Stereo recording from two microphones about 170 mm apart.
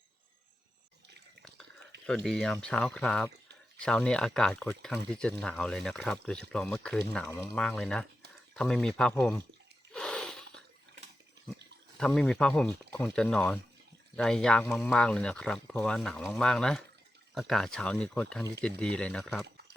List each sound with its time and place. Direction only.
2.0 s speech: 5° left (ahead or behind)
7.3 s speech: 15° left (ahead or behind)
7.5 s speech: 5° left (ahead or behind)
9.9 s a sound: 5° left (ahead or behind)
11.9 s speech: 5° left (ahead or behind)